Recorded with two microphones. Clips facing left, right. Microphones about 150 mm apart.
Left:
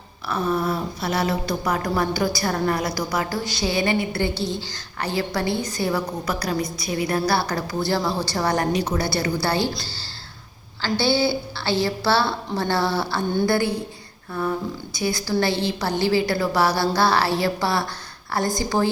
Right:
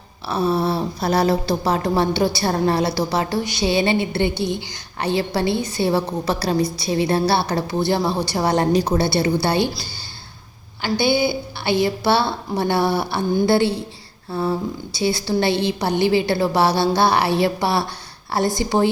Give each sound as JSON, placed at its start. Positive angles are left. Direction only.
{"t": 0.3, "sound": "a woman's voice", "side_deg": -30}
{"t": 10.8, "sound": "a woman's voice", "side_deg": -15}